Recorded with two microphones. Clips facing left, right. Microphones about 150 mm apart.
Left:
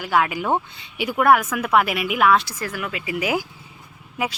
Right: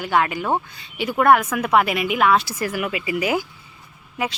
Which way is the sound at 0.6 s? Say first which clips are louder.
Even; 20° left (ahead or behind).